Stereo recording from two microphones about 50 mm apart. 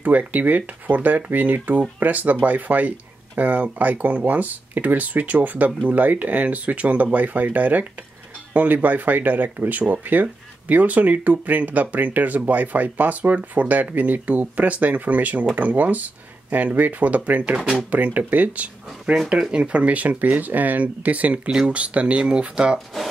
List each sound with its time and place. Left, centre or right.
0.0 s speech: right
21.5 s speech: right